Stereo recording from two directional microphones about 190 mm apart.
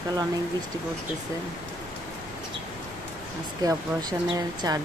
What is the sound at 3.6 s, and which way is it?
Speech, 20° right (ahead or behind).